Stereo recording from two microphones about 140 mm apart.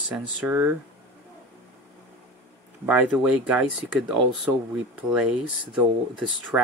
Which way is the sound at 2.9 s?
5° right (ahead or behind).